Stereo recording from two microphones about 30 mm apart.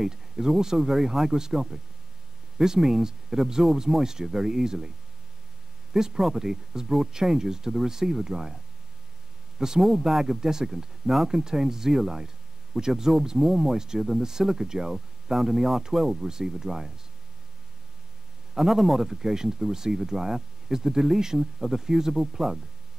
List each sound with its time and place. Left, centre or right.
0.0 s speech: centre
5.9 s speech: centre
9.8 s speech: centre
18.6 s speech: centre
19.0 s speech: centre